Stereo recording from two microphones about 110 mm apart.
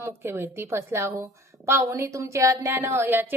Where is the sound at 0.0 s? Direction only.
20° right (ahead or behind).